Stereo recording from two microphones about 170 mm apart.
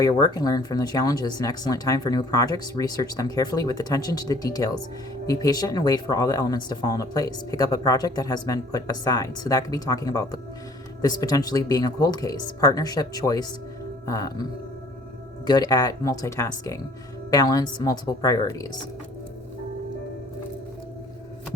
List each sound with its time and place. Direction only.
0.0 s speech: 25° left (ahead or behind)
15.4 s speech: 25° left (ahead or behind)